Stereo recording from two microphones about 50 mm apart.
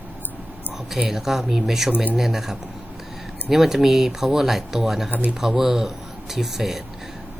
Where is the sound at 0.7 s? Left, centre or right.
Centre.